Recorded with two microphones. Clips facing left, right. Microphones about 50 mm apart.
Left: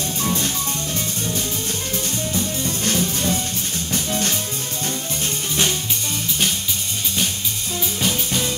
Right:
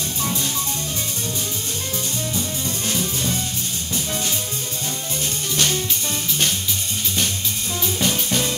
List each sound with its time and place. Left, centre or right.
8.0 s music: centre